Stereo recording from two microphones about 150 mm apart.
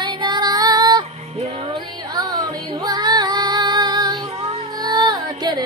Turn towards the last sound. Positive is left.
turn(degrees=-30)  # may be behind; listen again after turning